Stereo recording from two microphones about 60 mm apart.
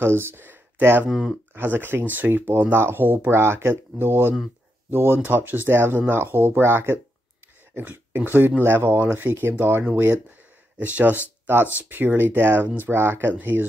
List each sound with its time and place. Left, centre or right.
0.0 s speech: right
7.7 s a sound: right
8.3 s speech: right